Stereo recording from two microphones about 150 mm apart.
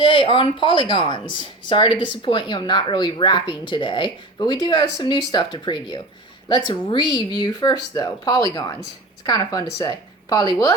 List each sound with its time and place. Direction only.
0.0 s a woman's voice: 35° left (ahead or behind)